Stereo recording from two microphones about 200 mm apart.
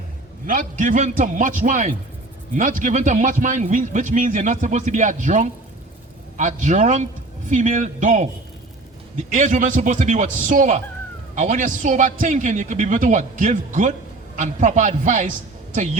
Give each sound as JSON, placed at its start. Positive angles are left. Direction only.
{"t": 0.4, "sound": "speech", "side_deg": -40}